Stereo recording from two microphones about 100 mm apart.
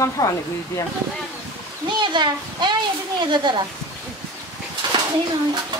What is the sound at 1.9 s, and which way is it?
Speech, 50° right (ahead or behind).